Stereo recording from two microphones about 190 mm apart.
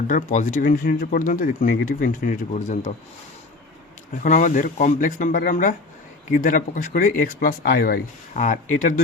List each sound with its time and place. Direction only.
0.1 s speech: 40° left (ahead or behind)
4.2 s speech: 40° left (ahead or behind)